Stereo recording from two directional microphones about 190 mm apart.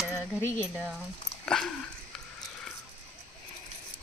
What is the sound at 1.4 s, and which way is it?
Speech, 5° left (ahead or behind).